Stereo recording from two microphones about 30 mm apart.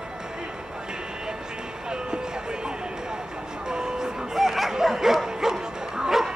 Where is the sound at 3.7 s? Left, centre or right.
Right.